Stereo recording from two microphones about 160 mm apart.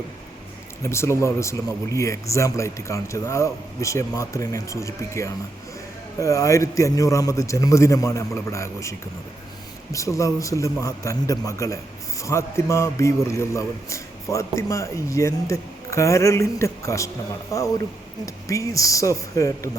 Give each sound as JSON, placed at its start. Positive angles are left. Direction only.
{"t": 0.8, "sound": "a man's voice", "side_deg": 15}